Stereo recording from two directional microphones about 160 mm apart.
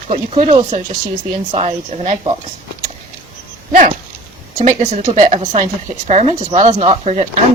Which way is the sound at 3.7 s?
55° right (ahead or behind).